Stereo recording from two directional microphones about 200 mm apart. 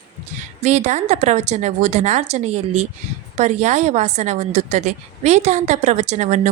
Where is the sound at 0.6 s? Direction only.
35° right (ahead or behind).